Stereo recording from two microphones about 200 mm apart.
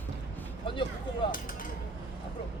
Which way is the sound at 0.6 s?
25° left (ahead or behind).